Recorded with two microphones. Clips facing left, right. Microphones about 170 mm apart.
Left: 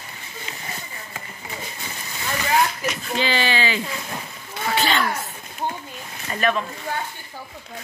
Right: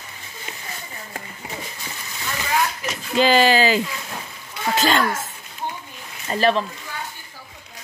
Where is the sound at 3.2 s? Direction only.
40° right (ahead or behind).